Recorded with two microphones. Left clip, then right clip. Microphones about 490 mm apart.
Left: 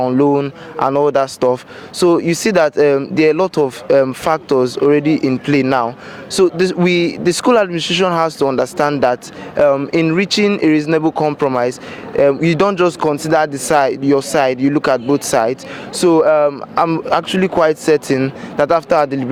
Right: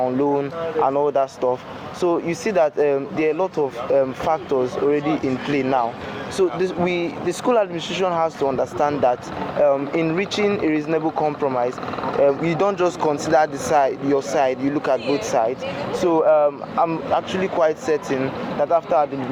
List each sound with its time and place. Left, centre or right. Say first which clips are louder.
0.0 s speech: left 6 dB; left